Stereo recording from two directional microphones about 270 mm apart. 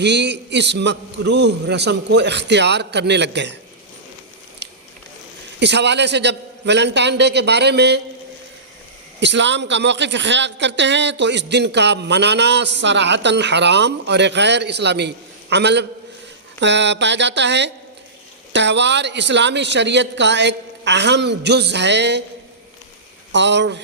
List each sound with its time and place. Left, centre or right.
0.0 s speech: right
5.5 s speech: right
9.2 s speech: right
23.3 s speech: right